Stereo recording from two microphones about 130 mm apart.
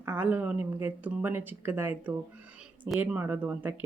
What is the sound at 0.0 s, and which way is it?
Speech, 15° right (ahead or behind).